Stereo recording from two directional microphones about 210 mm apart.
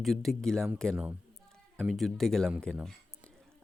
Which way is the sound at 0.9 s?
10° right (ahead or behind).